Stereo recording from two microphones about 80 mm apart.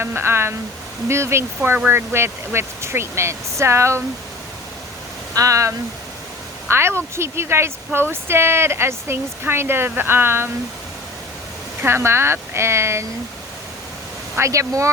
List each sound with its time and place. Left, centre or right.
0.0 s speech: right
5.3 s speech: right
11.8 s speech: right
14.3 s speech: right